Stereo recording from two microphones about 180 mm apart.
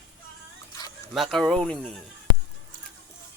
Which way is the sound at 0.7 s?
20° left (ahead or behind).